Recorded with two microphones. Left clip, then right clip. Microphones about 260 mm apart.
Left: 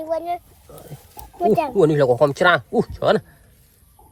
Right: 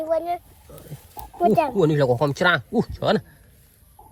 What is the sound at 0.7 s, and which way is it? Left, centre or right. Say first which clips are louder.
Pig: left 3 dB; left.